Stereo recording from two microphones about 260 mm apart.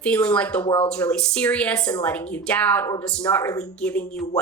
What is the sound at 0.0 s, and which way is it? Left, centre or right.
Speech, centre.